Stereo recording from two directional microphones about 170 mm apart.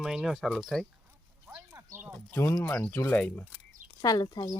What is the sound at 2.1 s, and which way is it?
Speech, 10° left (ahead or behind).